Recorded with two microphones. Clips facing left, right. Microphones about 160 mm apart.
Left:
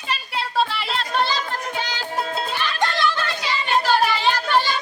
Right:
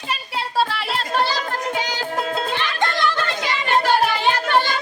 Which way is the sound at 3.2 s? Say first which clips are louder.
Right 2 dB; 55° right (ahead or behind).